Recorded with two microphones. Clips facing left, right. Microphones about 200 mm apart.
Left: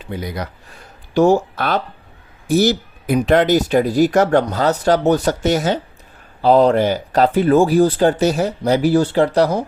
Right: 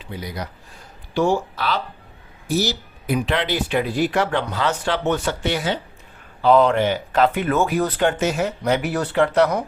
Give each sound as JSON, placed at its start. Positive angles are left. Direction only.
{"t": 0.0, "sound": "speech", "side_deg": 55}
{"t": 1.1, "sound": "speech", "side_deg": 45}